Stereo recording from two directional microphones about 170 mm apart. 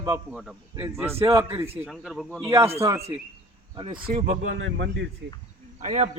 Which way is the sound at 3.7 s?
30° right (ahead or behind).